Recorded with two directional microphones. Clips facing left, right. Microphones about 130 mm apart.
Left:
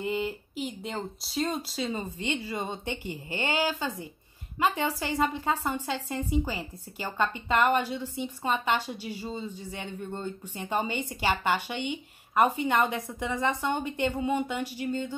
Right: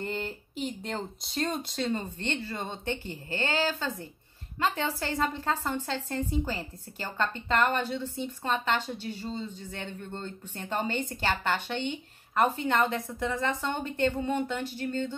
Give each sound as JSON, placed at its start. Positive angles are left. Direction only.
{"t": 0.0, "sound": "a woman's voice", "side_deg": 10}